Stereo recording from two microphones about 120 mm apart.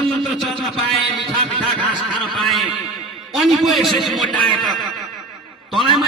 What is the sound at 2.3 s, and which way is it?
A man's voice, centre (ahead or behind).